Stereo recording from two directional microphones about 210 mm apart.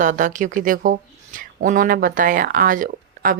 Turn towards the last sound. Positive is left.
turn(degrees=-40)  # may be behind; listen again after turning